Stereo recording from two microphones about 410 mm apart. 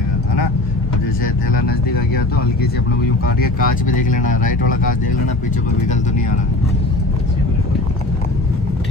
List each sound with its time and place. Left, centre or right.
3.3 s speech: centre